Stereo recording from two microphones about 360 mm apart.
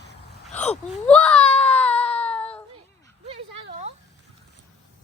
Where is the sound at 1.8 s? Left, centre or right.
Centre.